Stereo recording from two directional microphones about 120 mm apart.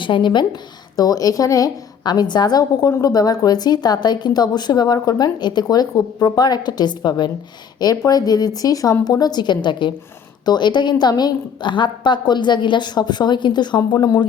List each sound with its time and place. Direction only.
0.0 s a woman's voice: 40° left (ahead or behind)